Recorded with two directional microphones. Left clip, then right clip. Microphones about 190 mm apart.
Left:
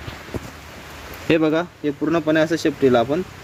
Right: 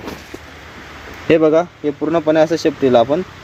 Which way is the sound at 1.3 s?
10° left (ahead or behind).